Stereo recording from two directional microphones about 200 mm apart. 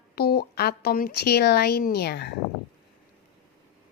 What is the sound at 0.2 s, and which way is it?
A woman's voice, 50° left (ahead or behind).